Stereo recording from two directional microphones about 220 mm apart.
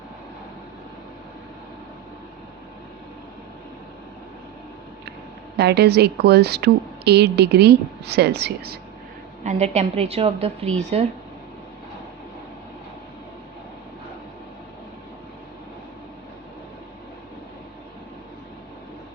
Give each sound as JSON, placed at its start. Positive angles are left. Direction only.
{"t": 5.5, "sound": "a woman's voice", "side_deg": -50}
{"t": 9.4, "sound": "a woman's voice", "side_deg": -30}